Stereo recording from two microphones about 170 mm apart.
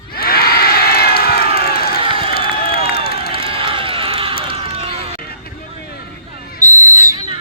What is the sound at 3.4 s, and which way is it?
Run, 30° right (ahead or behind).